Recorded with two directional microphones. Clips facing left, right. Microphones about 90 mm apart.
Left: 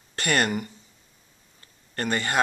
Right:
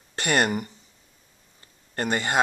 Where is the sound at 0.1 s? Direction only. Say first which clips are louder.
Right 1 dB; 25° right (ahead or behind).